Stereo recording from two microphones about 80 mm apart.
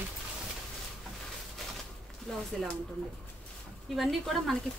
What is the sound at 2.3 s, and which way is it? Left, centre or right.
Speech, centre.